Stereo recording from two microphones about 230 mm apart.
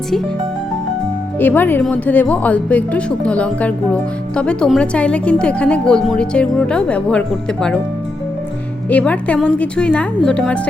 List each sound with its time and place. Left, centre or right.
1.4 s speech: centre
8.9 s speech: centre